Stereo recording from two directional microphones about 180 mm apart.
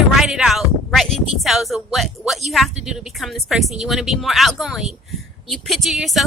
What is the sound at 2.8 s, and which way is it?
Speech, 5° right (ahead or behind).